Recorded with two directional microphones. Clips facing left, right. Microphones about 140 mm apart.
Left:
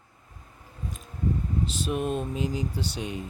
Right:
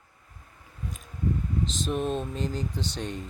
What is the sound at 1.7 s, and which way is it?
Speech, 10° left (ahead or behind).